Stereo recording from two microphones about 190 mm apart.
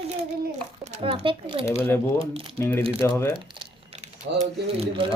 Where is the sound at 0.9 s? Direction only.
35° right (ahead or behind).